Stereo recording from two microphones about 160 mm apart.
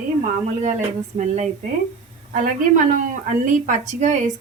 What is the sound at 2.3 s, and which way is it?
Speech, 55° right (ahead or behind).